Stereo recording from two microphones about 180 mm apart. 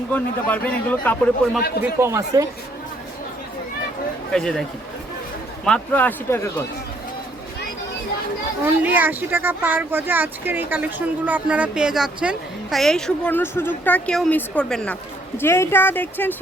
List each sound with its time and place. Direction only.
0.1 s a man's voice: 10° left (ahead or behind)
1.8 s a man's voice: 15° right (ahead or behind)
4.3 s speech: 5° left (ahead or behind)
5.6 s a man's voice: 5° left (ahead or behind)
8.8 s a man's voice: 10° right (ahead or behind); by 16.3 s 10° left (ahead or behind)